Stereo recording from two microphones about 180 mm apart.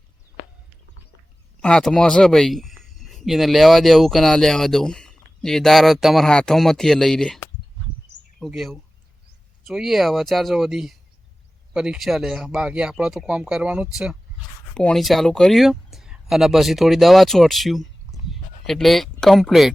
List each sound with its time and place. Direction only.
1.6 s speech: 5° left (ahead or behind)
8.4 s speech: centre (ahead or behind)